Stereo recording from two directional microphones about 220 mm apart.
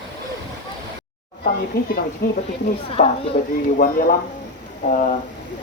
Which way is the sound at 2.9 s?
25° left (ahead or behind).